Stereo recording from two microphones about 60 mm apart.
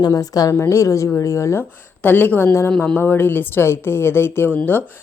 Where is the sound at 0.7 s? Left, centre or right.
Left.